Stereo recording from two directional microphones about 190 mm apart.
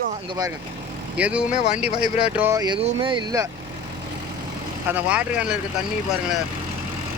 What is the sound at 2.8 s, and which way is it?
Speech, 25° right (ahead or behind).